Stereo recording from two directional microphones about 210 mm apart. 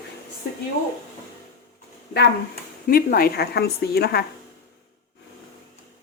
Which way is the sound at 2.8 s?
45° left (ahead or behind).